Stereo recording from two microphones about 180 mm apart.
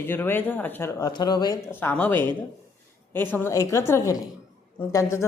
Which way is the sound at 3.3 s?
15° left (ahead or behind).